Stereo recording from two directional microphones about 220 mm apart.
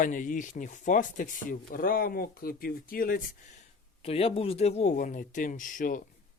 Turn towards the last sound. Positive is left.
turn(degrees=35)  # may be behind; listen again after turning